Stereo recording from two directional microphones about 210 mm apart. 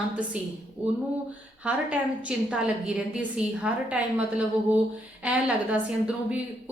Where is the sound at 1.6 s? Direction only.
5° right (ahead or behind).